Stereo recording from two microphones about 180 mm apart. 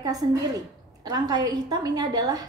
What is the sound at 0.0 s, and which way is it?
A woman's voice, 20° right (ahead or behind).